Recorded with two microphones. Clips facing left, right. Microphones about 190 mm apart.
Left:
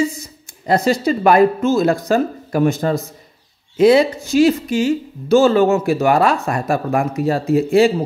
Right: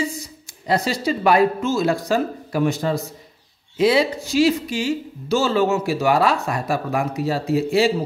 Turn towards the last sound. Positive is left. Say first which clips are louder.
# left 5 dB
turn(degrees=50)  # may be behind; listen again after turning